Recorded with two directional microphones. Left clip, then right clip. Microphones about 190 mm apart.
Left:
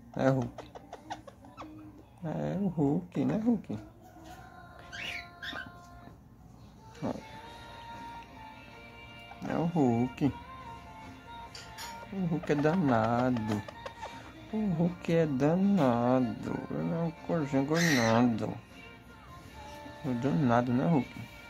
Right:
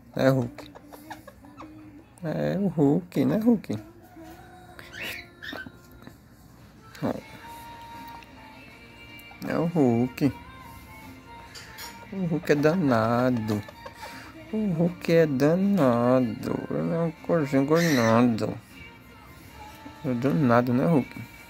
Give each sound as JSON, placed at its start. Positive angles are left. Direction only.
{"t": 0.1, "sound": "speech", "side_deg": -20}
{"t": 2.2, "sound": "speech", "side_deg": -20}
{"t": 7.0, "sound": "speech", "side_deg": -20}
{"t": 9.4, "sound": "speech", "side_deg": -15}
{"t": 12.3, "sound": "speech", "side_deg": -15}
{"t": 14.8, "sound": "speech", "side_deg": -15}
{"t": 20.1, "sound": "speech", "side_deg": -20}